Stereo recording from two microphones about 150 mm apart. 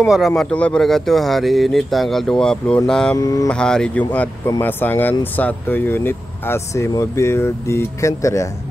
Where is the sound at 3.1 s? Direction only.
20° left (ahead or behind).